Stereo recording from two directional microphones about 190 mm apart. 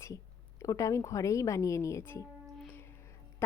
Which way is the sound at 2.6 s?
10° left (ahead or behind).